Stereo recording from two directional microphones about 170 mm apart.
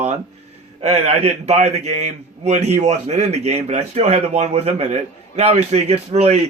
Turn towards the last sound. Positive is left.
turn(degrees=-40)  # may be behind; listen again after turning